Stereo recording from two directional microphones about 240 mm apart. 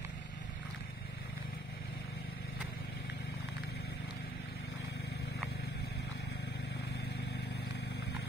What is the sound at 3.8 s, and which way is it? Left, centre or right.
Vehicle, left.